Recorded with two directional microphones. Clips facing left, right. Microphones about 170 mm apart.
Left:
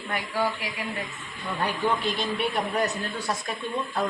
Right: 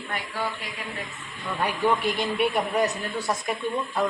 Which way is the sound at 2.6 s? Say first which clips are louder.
Right 2 dB; centre (ahead or behind).